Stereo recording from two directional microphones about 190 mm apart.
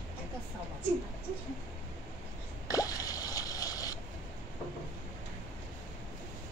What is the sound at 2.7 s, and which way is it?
Drip, 20° left (ahead or behind).